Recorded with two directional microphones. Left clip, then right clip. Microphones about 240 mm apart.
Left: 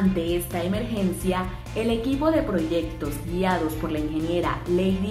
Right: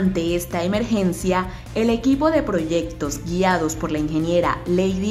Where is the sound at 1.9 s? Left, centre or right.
Right.